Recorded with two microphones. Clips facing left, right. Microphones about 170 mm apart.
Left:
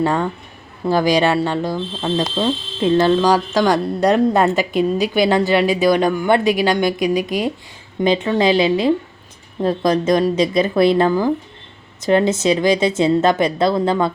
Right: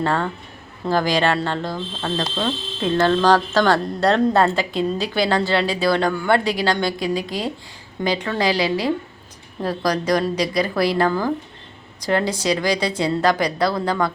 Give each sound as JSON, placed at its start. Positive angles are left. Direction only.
{"t": 0.0, "sound": "a woman's voice", "side_deg": 15}